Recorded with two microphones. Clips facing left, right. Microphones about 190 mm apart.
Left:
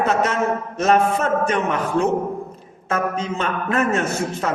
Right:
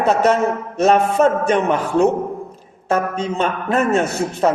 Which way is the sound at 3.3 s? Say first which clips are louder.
Right 5 dB; 30° right (ahead or behind).